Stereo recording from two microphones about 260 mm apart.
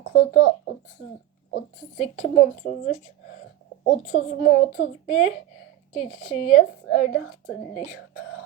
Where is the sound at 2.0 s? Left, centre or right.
Left.